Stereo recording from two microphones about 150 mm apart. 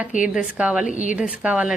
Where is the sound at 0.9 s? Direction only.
60° left (ahead or behind).